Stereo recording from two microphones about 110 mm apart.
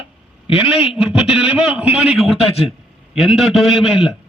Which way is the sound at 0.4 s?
60° left (ahead or behind).